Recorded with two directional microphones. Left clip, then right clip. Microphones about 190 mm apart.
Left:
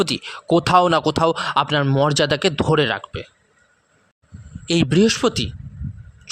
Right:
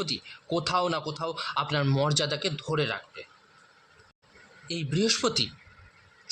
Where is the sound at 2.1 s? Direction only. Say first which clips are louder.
Left 10 dB; 50° left (ahead or behind).